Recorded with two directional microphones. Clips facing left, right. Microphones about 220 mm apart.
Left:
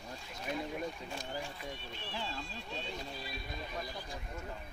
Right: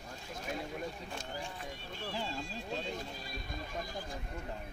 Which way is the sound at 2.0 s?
45° right (ahead or behind).